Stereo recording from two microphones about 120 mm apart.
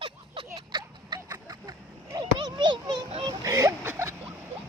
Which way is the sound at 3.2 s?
30° right (ahead or behind).